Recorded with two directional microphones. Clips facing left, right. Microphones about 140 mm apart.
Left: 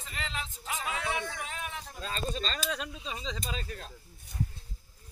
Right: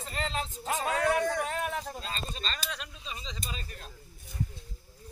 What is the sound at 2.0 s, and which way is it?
Speech, 55° left (ahead or behind).